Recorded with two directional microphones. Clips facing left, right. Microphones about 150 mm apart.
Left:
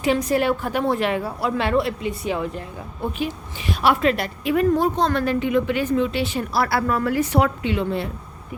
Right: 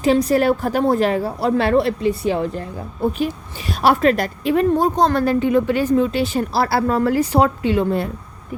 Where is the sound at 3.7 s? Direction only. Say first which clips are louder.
Right 4 dB; 40° right (ahead or behind).